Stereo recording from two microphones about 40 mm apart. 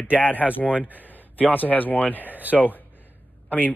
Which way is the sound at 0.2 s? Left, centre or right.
Left.